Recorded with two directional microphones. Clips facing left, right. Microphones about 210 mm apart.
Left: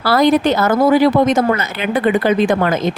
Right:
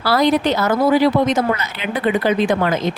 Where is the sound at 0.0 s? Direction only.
50° left (ahead or behind).